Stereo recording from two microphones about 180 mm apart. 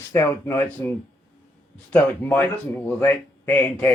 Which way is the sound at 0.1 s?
15° left (ahead or behind).